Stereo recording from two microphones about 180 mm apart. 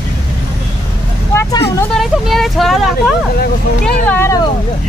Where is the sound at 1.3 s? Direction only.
15° left (ahead or behind).